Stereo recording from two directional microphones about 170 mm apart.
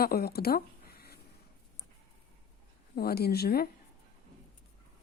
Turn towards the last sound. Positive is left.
turn(degrees=70)  # may be behind; listen again after turning